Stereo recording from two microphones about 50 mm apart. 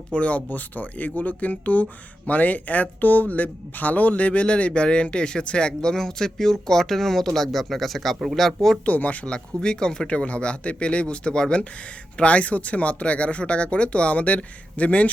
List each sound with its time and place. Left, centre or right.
0.1 s speech: left; by 8.8 s centre
8.8 s speech: left
9.2 s speech: centre